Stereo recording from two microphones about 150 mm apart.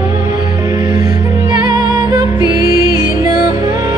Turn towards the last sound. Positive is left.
turn(degrees=-25)  # may be behind; listen again after turning